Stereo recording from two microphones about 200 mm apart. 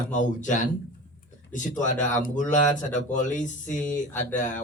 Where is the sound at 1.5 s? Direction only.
40° left (ahead or behind).